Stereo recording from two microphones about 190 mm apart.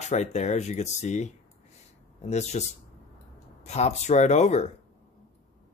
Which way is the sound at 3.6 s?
35° left (ahead or behind).